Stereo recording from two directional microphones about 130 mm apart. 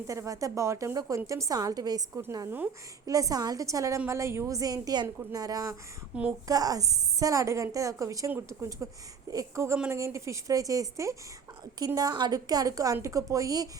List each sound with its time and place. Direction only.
0.1 s a woman's voice: 25° right (ahead or behind)
6.1 s a woman's voice: 10° right (ahead or behind)
6.5 s a woman's voice: 30° right (ahead or behind)